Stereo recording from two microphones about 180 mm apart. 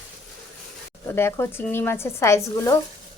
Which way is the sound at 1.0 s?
15° left (ahead or behind).